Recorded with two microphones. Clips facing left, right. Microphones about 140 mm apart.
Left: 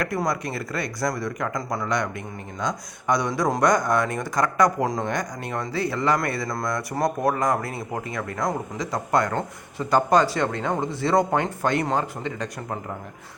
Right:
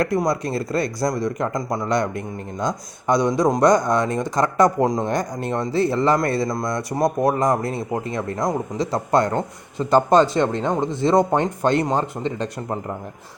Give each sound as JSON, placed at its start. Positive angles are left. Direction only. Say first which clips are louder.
{"t": 0.0, "sound": "speech", "louder": "right 5 dB", "side_deg": -25}
{"t": 1.9, "sound": "speech", "louder": "right 7 dB", "side_deg": -30}